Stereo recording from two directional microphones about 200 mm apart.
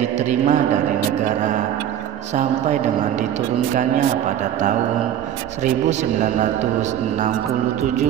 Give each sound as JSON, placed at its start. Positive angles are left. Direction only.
{"t": 0.2, "sound": "a man's voice", "side_deg": -35}
{"t": 2.3, "sound": "a man's voice", "side_deg": -35}
{"t": 5.6, "sound": "a man's voice", "side_deg": -35}